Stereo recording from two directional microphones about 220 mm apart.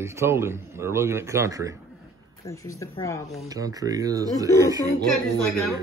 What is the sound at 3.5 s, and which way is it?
Speech, 15° right (ahead or behind).